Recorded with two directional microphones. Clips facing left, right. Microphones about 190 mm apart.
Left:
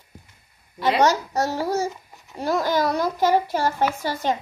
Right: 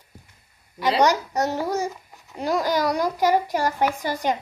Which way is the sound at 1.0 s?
15° right (ahead or behind).